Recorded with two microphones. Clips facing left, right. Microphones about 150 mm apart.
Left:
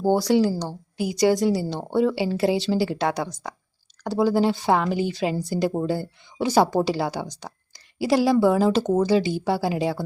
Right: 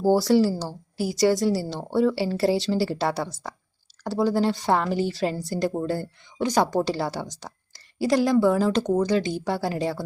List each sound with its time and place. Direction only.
0.0 s speech: centre (ahead or behind)